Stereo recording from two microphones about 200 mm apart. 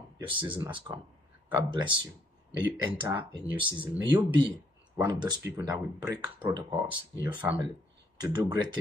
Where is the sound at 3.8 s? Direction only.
25° right (ahead or behind).